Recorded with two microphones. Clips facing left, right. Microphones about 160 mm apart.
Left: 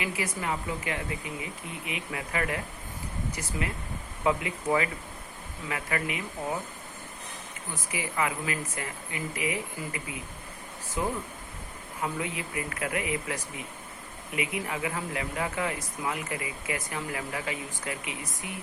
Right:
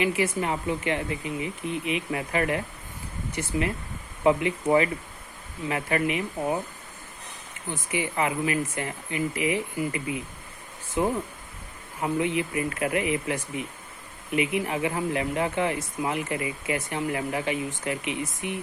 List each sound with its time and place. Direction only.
0.0 s speech: 25° right (ahead or behind)
7.7 s speech: 25° right (ahead or behind)